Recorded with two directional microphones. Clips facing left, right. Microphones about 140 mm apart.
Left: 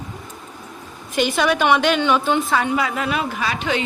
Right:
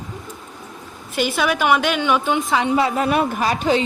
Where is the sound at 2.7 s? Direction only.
30° right (ahead or behind).